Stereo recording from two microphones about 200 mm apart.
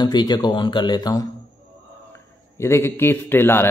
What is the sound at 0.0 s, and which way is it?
Speech, 20° left (ahead or behind).